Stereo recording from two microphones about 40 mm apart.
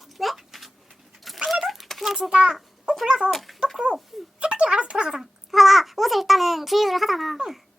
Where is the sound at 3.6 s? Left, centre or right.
Right.